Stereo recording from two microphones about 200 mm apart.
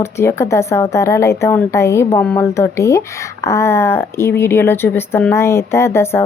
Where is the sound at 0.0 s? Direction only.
15° left (ahead or behind).